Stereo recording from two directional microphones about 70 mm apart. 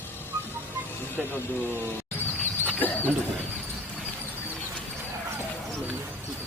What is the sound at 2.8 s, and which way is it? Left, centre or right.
Speech, left.